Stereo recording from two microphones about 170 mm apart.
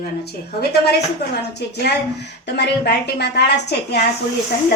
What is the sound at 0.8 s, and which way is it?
A woman's voice, 75° left (ahead or behind).